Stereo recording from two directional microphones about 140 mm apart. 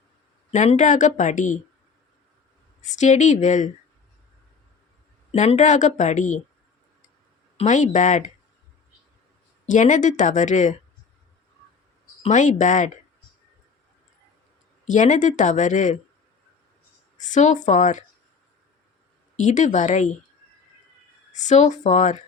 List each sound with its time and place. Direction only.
0.5 s speech: 55° left (ahead or behind)
2.9 s speech: 60° left (ahead or behind)
5.3 s speech: 50° left (ahead or behind)
7.5 s speech: 60° left (ahead or behind)
9.6 s speech: 65° left (ahead or behind)
12.3 s speech: 60° left (ahead or behind)
14.8 s speech: 60° left (ahead or behind)
17.3 s speech: 60° left (ahead or behind)
19.4 s speech: 60° left (ahead or behind)
21.4 s speech: 60° left (ahead or behind)